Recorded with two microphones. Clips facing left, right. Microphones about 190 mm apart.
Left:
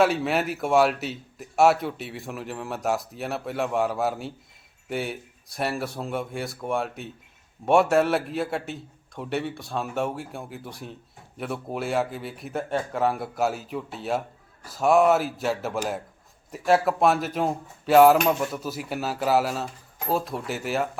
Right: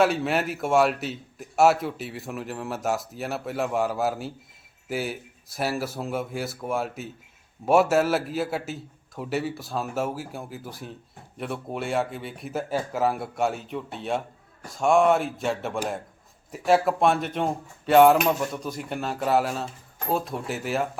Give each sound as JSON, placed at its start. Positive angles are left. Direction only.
{"t": 0.0, "sound": "speech", "side_deg": 0}